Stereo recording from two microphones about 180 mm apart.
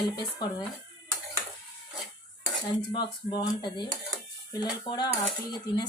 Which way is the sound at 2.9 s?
25° left (ahead or behind).